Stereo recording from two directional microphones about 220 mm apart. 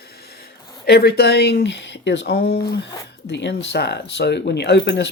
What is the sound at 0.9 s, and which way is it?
Speech, 45° left (ahead or behind).